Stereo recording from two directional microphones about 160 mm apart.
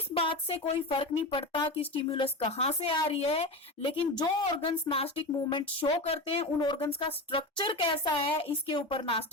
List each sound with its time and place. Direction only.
0.1 s a woman's voice: 35° left (ahead or behind)